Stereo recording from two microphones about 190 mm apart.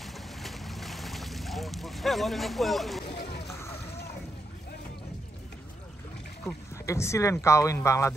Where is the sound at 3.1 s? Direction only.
55° left (ahead or behind).